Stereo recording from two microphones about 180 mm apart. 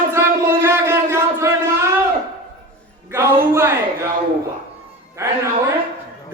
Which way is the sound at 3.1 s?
15° right (ahead or behind).